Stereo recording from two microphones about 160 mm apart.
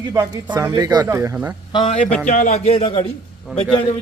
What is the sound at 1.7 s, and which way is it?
Speech, 40° left (ahead or behind).